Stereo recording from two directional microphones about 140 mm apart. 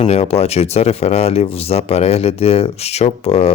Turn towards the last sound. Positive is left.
turn(degrees=45)  # may be behind; listen again after turning